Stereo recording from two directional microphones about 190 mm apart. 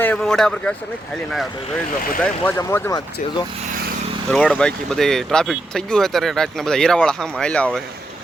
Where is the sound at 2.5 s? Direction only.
15° left (ahead or behind).